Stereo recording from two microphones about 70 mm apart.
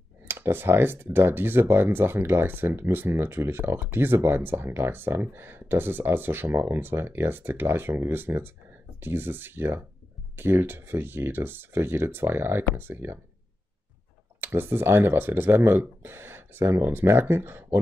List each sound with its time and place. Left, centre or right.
0.3 s speech: right
14.4 s speech: right